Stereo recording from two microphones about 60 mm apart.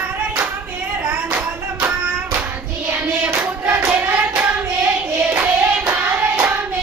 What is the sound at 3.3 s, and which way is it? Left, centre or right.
Hands, right.